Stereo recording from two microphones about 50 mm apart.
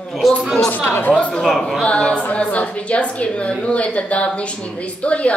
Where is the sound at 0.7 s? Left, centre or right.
Left.